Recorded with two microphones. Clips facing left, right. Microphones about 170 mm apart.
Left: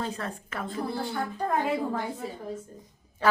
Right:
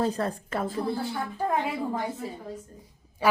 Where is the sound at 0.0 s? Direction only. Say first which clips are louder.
Right 6 dB; 35° right (ahead or behind).